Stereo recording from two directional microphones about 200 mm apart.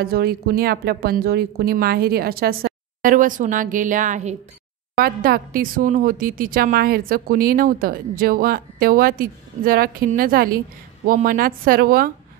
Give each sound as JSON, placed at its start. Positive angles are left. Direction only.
{"t": 0.0, "sound": "a woman's voice", "side_deg": -50}
{"t": 4.9, "sound": "a woman's voice", "side_deg": -50}